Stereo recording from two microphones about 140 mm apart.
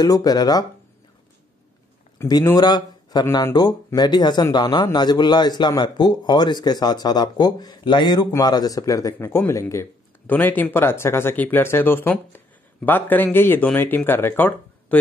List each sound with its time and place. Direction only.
0.0 s a man's voice: 25° left (ahead or behind)
2.1 s a man's voice: 25° left (ahead or behind)